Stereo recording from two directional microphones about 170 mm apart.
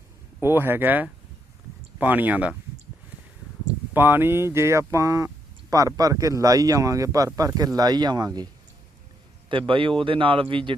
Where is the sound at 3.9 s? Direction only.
10° right (ahead or behind).